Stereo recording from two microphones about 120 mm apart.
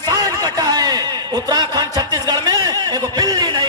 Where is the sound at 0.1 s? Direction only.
30° right (ahead or behind).